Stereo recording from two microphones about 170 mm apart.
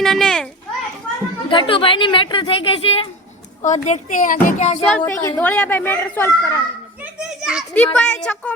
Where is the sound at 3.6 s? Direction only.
45° left (ahead or behind).